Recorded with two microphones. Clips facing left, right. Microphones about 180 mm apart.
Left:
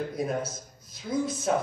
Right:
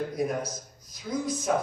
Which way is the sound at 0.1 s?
25° left (ahead or behind).